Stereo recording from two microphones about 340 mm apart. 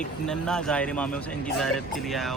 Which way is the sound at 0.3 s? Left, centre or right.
Centre.